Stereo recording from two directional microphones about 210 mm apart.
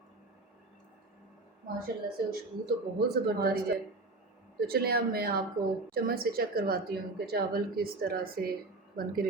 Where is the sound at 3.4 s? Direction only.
45° right (ahead or behind).